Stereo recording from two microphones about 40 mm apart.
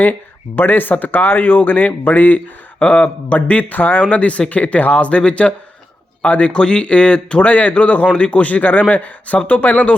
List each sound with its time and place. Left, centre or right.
0.0 s speech: left
2.8 s speech: left
4.0 s speech: left